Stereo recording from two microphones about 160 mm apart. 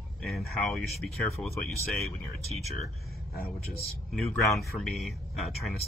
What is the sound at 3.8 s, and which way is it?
Speech, centre (ahead or behind).